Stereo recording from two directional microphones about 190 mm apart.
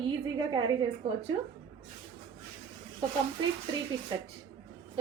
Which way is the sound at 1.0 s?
30° right (ahead or behind).